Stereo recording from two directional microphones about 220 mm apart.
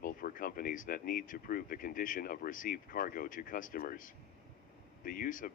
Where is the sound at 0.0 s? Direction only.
40° left (ahead or behind).